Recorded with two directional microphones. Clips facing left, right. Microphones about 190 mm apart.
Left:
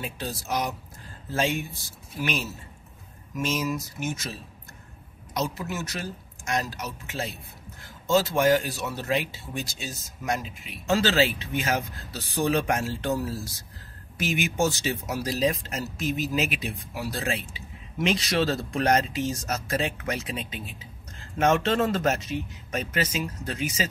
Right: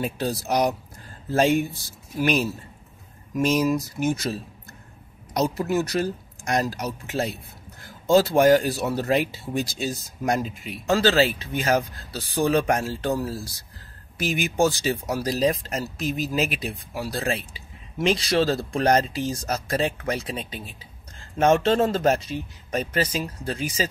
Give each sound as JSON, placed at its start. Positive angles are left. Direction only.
{"t": 0.3, "sound": "speech", "side_deg": -35}